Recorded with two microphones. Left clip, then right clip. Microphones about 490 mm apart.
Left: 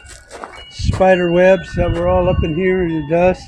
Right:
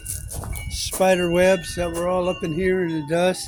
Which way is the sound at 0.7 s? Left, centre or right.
Right.